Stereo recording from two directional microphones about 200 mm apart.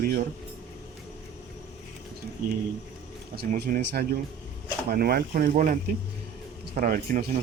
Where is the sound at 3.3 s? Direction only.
50° right (ahead or behind).